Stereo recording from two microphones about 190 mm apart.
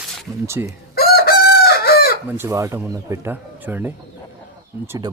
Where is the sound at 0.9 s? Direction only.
55° left (ahead or behind).